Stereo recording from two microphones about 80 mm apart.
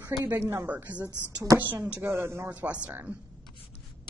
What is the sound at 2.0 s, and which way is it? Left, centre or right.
Speech, right.